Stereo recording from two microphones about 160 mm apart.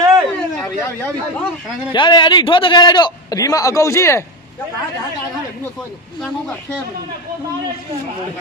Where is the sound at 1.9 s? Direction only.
30° left (ahead or behind).